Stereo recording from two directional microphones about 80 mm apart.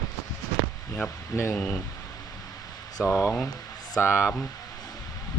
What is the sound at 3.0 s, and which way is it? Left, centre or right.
Speech, left.